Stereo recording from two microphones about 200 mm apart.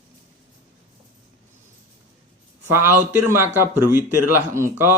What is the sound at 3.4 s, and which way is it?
Speech, 10° right (ahead or behind).